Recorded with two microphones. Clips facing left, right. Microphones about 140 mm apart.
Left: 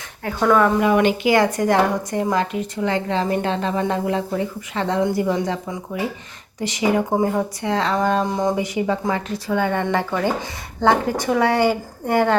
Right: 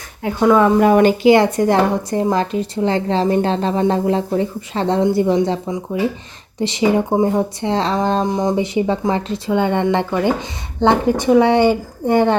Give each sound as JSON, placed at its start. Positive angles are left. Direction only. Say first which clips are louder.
{"t": 0.2, "sound": "speech", "louder": "right 4 dB", "side_deg": -15}
{"t": 0.8, "sound": "a woman's voice", "louder": "right 5 dB", "side_deg": -45}
{"t": 1.3, "sound": "a woman's voice", "louder": "right 4 dB", "side_deg": -25}